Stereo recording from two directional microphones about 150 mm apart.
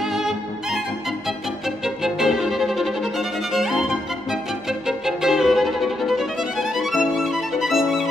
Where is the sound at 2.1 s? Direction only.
5° right (ahead or behind).